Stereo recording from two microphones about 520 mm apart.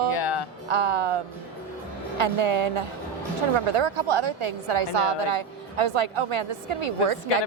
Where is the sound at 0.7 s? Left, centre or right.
Right.